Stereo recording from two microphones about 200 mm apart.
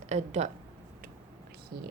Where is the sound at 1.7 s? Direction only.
50° right (ahead or behind).